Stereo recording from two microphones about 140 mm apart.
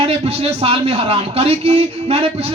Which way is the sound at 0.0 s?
45° right (ahead or behind).